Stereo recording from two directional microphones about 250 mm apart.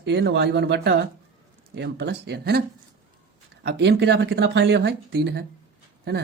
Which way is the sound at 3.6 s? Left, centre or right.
Right.